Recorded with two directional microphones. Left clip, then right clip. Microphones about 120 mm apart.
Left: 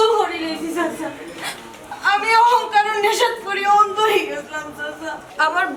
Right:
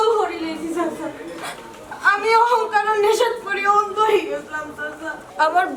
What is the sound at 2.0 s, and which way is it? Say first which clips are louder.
A woman's voice: left 1 dB; centre (ahead or behind).